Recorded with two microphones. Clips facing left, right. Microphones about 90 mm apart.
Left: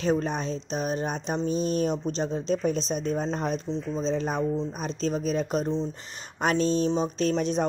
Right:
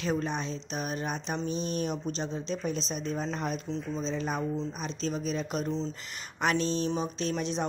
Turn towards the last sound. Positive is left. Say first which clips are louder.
# left 6 dB
turn(degrees=40)  # may be behind; listen again after turning